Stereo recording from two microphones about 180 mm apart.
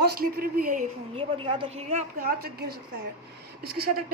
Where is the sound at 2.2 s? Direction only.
60° right (ahead or behind).